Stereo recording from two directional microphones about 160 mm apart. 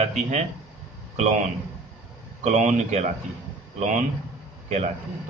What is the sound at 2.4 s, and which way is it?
A man's voice, 50° right (ahead or behind).